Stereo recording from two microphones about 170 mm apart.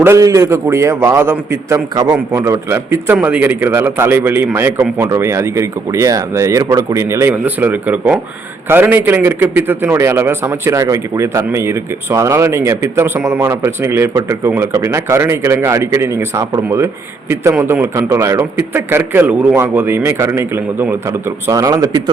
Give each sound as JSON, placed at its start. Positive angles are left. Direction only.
{"t": 0.0, "sound": "speech", "side_deg": -15}